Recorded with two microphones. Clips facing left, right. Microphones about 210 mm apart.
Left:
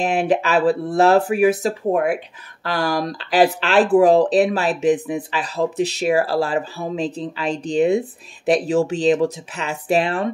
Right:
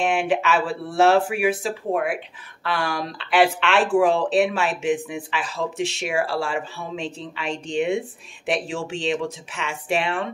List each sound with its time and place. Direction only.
0.0 s speech: 40° left (ahead or behind)